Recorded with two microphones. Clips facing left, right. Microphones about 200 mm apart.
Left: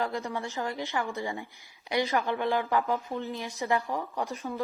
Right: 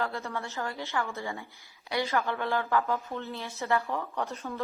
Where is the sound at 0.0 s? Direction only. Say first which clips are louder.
Left 2 dB; 15° left (ahead or behind).